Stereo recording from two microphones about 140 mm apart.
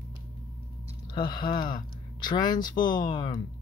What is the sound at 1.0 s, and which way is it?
Speech, 30° left (ahead or behind).